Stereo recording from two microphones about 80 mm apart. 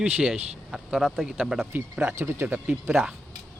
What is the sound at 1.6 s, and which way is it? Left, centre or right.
Speech, right.